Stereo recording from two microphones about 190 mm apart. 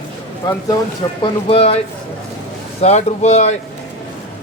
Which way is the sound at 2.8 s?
35° left (ahead or behind).